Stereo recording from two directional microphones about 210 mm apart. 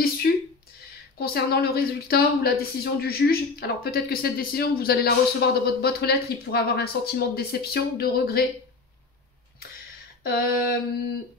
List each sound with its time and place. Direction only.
1.1 s speech: 50° left (ahead or behind)
10.2 s speech: 45° left (ahead or behind)